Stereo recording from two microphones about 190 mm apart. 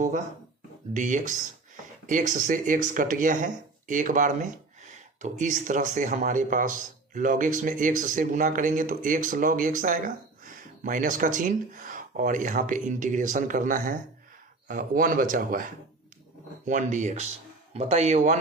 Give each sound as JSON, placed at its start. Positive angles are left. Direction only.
{"t": 0.9, "sound": "speech", "side_deg": -40}
{"t": 16.6, "sound": "speech", "side_deg": -40}